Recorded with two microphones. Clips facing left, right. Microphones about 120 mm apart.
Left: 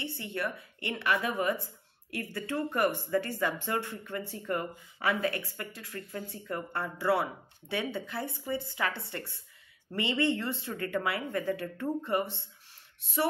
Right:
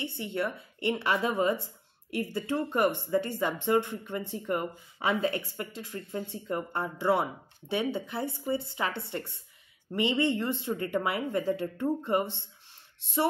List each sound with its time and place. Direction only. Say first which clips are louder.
0.0 s a woman's voice: right 3 dB; 20° right (ahead or behind)